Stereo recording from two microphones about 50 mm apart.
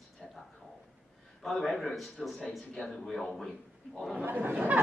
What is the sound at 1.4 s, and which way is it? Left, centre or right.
A man's voice, centre.